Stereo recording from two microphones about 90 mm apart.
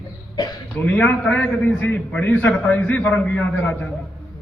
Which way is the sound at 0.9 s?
15° left (ahead or behind).